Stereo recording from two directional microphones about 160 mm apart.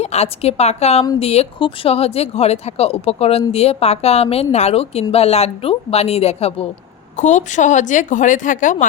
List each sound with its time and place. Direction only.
0.0 s speech: 40° left (ahead or behind)